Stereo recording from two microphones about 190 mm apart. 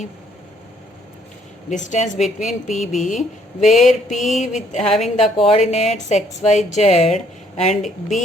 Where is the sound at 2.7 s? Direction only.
Centre (ahead or behind).